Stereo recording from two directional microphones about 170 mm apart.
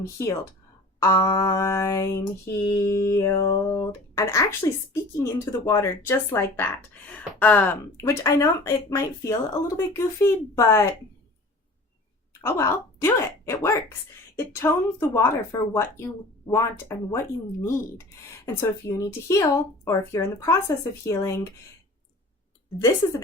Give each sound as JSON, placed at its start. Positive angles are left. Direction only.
{"t": 0.0, "sound": "speech", "side_deg": 20}
{"t": 12.3, "sound": "speech", "side_deg": 15}